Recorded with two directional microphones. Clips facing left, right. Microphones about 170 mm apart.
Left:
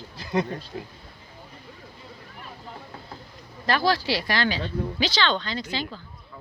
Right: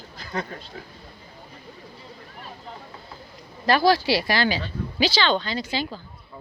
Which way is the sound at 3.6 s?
10° right (ahead or behind).